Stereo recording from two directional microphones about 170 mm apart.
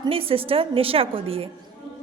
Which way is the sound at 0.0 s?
35° right (ahead or behind).